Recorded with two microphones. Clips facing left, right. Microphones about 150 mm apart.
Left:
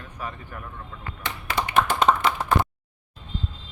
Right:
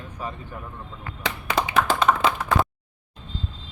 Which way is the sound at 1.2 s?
90° right.